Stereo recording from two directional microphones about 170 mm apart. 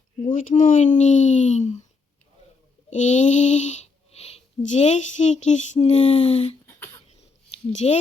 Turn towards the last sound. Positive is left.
turn(degrees=40)  # may be behind; listen again after turning